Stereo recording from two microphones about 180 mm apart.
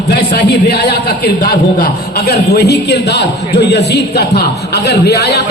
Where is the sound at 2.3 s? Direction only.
65° left (ahead or behind).